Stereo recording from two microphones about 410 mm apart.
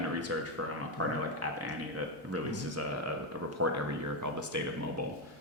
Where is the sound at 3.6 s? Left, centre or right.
Right.